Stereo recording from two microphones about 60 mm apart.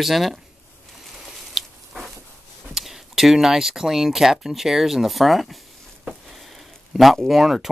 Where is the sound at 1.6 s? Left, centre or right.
Centre.